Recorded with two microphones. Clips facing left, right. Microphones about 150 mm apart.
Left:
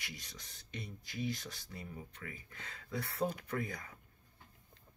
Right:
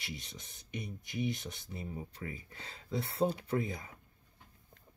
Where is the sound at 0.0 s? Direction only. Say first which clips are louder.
Right 5 dB; 25° right (ahead or behind).